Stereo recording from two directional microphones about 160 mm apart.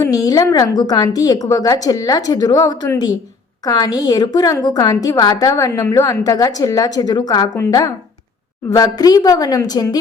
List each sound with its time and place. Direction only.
0.0 s a woman's voice: 25° left (ahead or behind)